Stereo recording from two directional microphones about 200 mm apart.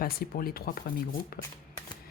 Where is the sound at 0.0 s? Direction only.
50° left (ahead or behind).